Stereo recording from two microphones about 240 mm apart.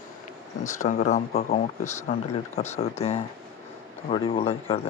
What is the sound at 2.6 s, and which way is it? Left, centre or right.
Speech, left.